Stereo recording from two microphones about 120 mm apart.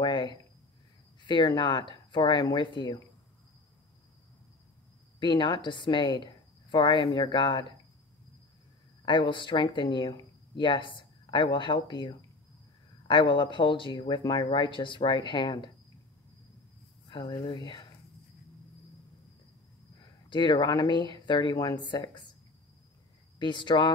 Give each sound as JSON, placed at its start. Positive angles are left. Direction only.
{"t": 0.0, "sound": "a sound", "side_deg": 40}
{"t": 1.2, "sound": "speech", "side_deg": 40}
{"t": 5.2, "sound": "speech", "side_deg": 40}
{"t": 9.0, "sound": "speech", "side_deg": 40}
{"t": 17.1, "sound": "speech", "side_deg": 35}
{"t": 20.2, "sound": "speech", "side_deg": 40}
{"t": 23.4, "sound": "speech", "side_deg": 40}